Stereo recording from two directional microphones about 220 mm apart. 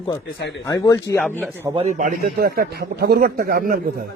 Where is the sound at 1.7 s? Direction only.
30° right (ahead or behind).